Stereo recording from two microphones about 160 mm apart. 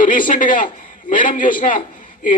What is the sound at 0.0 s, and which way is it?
A man's voice, 55° left (ahead or behind).